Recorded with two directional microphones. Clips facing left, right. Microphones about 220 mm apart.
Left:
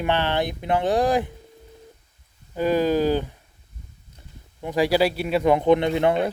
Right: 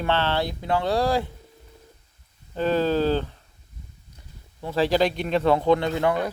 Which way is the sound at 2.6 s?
10° left (ahead or behind).